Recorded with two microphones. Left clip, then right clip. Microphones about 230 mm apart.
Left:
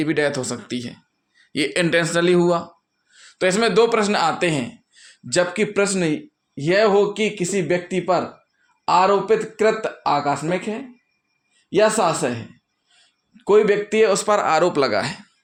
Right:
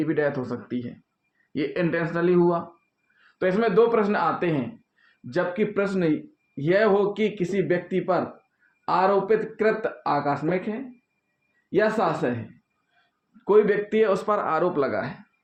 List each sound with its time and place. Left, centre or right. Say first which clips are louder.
0.0 s speech: left 4 dB; left
13.3 s speech: left 4 dB; left